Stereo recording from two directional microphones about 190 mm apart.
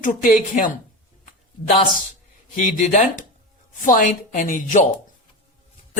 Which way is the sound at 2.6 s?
40° left (ahead or behind).